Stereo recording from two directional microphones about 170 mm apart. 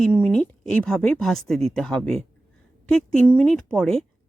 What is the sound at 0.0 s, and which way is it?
A woman's voice, 10° left (ahead or behind).